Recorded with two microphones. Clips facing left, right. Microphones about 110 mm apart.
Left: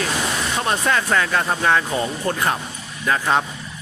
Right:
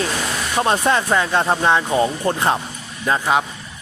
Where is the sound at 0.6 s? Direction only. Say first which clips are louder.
Right 5 dB; 25° right (ahead or behind).